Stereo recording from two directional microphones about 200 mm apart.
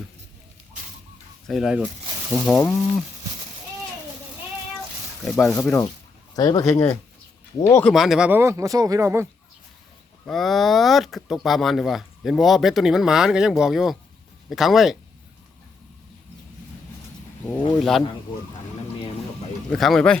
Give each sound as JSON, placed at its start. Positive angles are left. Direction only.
{"t": 1.5, "sound": "speech", "side_deg": 0}
{"t": 2.6, "sound": "speech", "side_deg": 15}
{"t": 5.2, "sound": "speech", "side_deg": 0}
{"t": 6.3, "sound": "speech", "side_deg": 20}
{"t": 10.2, "sound": "speech", "side_deg": 0}
{"t": 19.7, "sound": "speech", "side_deg": 0}